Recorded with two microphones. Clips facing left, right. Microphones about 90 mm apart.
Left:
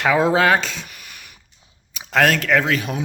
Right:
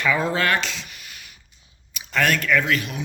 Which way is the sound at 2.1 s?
90° left.